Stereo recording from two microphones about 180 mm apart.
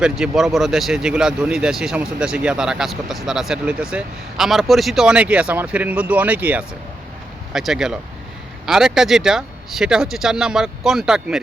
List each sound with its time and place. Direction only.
0.0 s speech: centre (ahead or behind)